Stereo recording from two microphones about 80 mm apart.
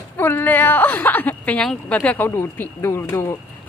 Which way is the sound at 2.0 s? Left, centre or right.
Left.